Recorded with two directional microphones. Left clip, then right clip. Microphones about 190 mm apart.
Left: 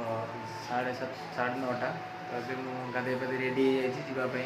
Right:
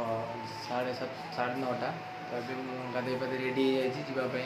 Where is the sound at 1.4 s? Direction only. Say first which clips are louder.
Left 1 dB; 15° right (ahead or behind).